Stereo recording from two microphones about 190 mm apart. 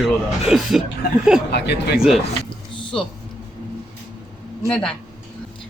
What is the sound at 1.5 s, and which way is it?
Speech, 60° left (ahead or behind).